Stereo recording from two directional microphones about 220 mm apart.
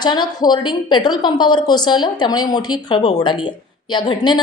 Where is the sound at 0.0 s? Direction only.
20° left (ahead or behind).